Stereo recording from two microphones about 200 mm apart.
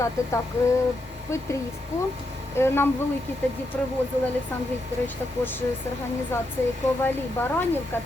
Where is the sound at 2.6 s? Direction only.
10° left (ahead or behind).